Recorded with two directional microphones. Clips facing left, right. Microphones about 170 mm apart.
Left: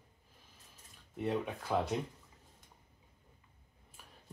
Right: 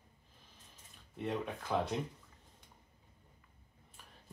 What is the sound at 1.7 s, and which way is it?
Speech, 10° left (ahead or behind).